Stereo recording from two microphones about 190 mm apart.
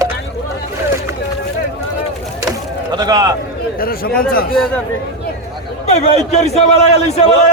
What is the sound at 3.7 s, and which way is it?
Speech, 50° left (ahead or behind).